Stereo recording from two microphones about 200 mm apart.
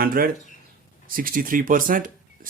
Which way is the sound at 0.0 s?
45° right (ahead or behind).